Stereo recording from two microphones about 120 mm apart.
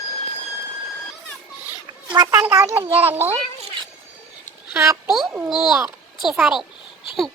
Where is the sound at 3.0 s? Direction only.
15° right (ahead or behind).